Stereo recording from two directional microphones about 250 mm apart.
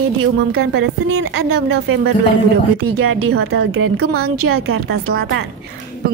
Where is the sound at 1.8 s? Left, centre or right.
Right.